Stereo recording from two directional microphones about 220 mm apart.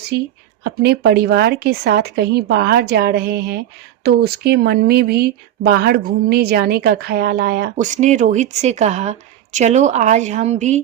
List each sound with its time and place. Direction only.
0.6 s speech: 45° right (ahead or behind); by 10.8 s 30° right (ahead or behind)